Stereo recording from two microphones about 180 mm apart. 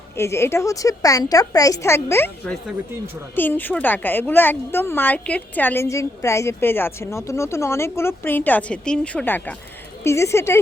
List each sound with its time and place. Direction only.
0.2 s a woman's voice: 15° left (ahead or behind)